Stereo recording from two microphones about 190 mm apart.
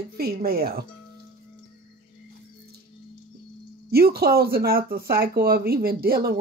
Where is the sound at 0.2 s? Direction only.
55° right (ahead or behind).